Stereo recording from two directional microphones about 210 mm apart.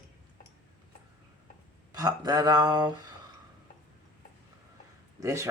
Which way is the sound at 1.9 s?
20° right (ahead or behind).